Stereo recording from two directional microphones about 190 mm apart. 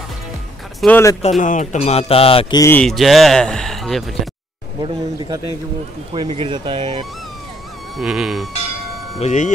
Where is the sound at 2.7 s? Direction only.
Centre (ahead or behind).